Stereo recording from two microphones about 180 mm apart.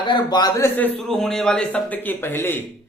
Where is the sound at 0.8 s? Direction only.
5° left (ahead or behind).